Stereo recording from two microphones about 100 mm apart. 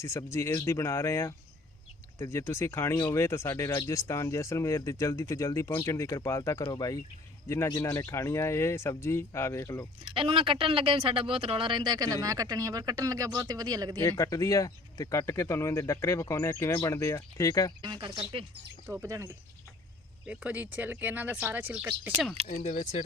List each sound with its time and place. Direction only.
0.0 s speech: 30° left (ahead or behind)
7.4 s speech: 25° left (ahead or behind)
10.0 s speech: 55° right (ahead or behind)
14.1 s speech: 35° left (ahead or behind)
17.8 s speech: 50° right (ahead or behind)
18.9 s speech: 30° right (ahead or behind)
20.2 s speech: 15° right (ahead or behind)
22.4 s speech: 90° right